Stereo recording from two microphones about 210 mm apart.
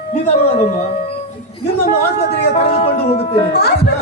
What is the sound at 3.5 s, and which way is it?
Speech, 50° left (ahead or behind).